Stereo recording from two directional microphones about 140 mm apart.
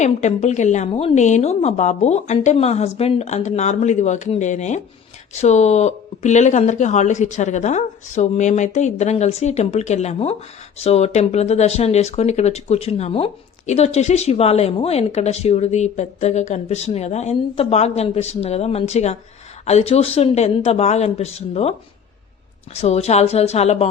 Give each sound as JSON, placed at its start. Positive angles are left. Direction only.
{"t": 0.0, "sound": "speech", "side_deg": 55}